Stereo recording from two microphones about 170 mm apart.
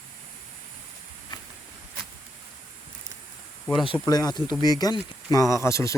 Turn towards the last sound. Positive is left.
turn(degrees=15)  # may be behind; listen again after turning